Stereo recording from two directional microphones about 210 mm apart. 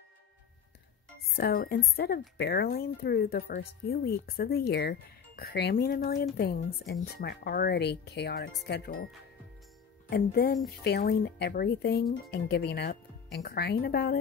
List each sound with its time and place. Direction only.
1.3 s speech: 45° left (ahead or behind)